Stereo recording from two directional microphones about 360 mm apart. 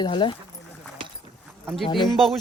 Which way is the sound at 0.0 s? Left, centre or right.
Centre.